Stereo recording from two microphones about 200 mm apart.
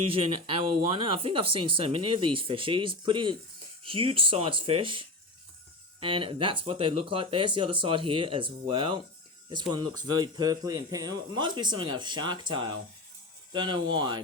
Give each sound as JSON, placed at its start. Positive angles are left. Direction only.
{"t": 0.1, "sound": "speech", "side_deg": -25}